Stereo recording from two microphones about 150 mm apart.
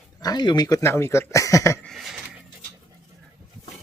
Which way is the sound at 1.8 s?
Centre (ahead or behind).